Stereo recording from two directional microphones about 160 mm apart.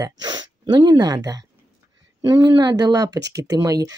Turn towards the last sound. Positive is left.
turn(degrees=-20)  # may be behind; listen again after turning